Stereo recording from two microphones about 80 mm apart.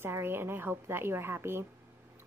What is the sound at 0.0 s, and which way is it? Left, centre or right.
A woman's voice, right.